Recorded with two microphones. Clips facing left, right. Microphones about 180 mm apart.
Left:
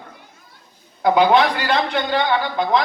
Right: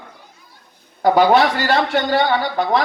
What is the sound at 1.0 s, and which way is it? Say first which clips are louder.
Speech: right 2 dB; 40° right (ahead or behind).